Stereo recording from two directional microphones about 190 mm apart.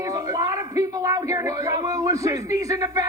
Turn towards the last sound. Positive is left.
turn(degrees=-15)  # may be behind; listen again after turning